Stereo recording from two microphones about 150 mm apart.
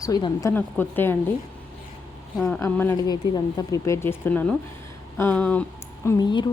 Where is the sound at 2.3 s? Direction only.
5° left (ahead or behind).